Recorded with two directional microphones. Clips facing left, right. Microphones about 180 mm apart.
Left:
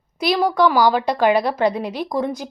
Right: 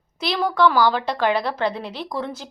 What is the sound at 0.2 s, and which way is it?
A woman's voice, 15° left (ahead or behind).